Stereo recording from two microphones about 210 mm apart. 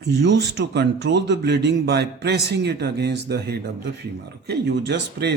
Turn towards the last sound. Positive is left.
turn(degrees=-55)  # may be behind; listen again after turning